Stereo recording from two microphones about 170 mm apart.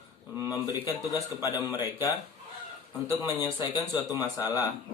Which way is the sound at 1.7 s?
20° left (ahead or behind).